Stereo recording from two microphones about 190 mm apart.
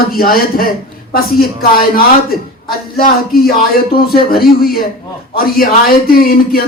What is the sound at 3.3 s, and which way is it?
Speech, 50° left (ahead or behind).